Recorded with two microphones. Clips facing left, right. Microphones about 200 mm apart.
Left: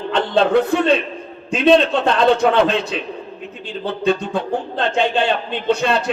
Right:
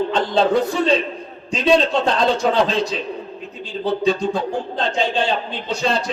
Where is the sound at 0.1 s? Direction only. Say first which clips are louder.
Left 7 dB; 60° left (ahead or behind).